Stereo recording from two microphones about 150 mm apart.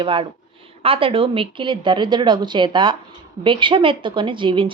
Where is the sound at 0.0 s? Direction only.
35° right (ahead or behind).